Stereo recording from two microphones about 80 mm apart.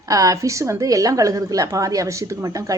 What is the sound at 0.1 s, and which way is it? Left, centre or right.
A woman's voice, right.